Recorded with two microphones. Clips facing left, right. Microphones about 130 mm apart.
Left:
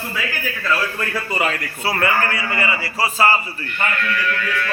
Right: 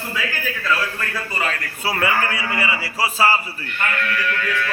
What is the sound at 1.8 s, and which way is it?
Speech, 15° right (ahead or behind).